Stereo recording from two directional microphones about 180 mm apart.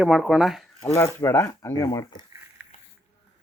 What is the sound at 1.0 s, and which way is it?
Speech, 15° left (ahead or behind).